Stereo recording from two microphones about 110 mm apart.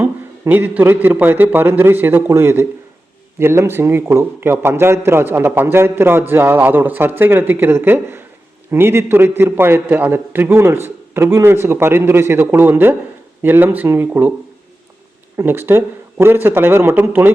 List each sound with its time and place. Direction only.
0.0 s a man's voice: 15° right (ahead or behind)
15.4 s a man's voice: 20° right (ahead or behind)